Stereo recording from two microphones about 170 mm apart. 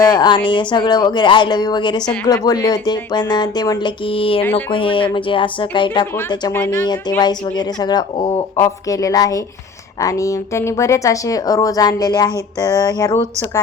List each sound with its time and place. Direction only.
0.1 s speech: 25° left (ahead or behind)
4.5 s a sound: 30° left (ahead or behind)
5.1 s speech: 30° left (ahead or behind)
6.5 s speech: 10° left (ahead or behind)
7.2 s speech: 25° left (ahead or behind)